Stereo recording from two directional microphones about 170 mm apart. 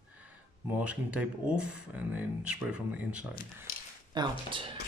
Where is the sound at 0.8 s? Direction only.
5° right (ahead or behind).